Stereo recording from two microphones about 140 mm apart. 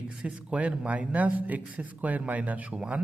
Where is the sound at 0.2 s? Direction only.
10° right (ahead or behind).